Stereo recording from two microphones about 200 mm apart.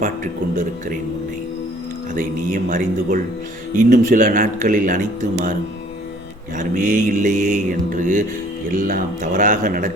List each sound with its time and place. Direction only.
2.1 s a man's voice: 45° right (ahead or behind)
3.8 s mantra: 40° right (ahead or behind)
6.6 s mantra: 40° right (ahead or behind)